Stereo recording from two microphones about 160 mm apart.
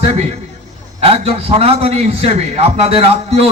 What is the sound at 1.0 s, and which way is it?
A man's voice, 40° right (ahead or behind).